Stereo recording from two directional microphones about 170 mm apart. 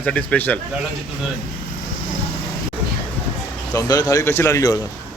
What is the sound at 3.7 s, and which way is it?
A man's voice, 20° left (ahead or behind).